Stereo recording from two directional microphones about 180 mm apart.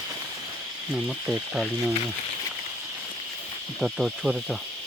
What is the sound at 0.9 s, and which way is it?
Speech, 5° right (ahead or behind).